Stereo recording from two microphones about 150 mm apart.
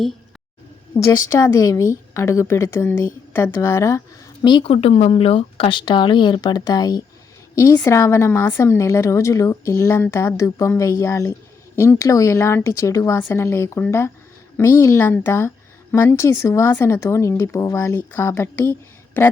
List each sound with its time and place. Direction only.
0.9 s a woman's voice: 25° left (ahead or behind)
4.4 s a woman's voice: 35° left (ahead or behind); by 19.3 s 15° left (ahead or behind)